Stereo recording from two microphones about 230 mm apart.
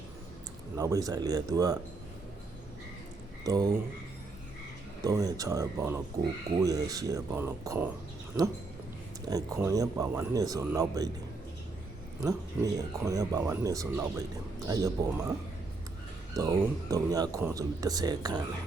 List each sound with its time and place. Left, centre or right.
0.8 s speech: centre
3.4 s speech: centre
5.0 s speech: centre
9.3 s speech: centre
12.7 s speech: centre
16.3 s speech: centre